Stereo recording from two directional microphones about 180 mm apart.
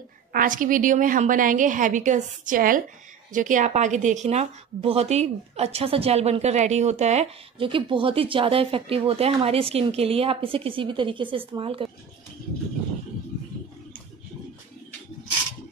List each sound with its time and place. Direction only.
0.3 s a woman's voice: 50° right (ahead or behind); by 11.9 s 30° right (ahead or behind)